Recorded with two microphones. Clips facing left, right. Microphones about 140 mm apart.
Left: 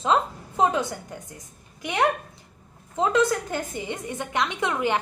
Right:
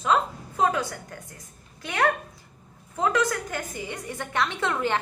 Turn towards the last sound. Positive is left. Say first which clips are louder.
# left 1 dB
turn(degrees=15)  # may be behind; listen again after turning